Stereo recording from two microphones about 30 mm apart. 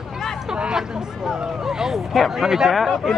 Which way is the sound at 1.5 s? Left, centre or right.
Centre.